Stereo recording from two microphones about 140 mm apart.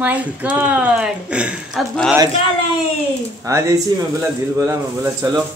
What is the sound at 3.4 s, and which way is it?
A man's voice, 20° right (ahead or behind).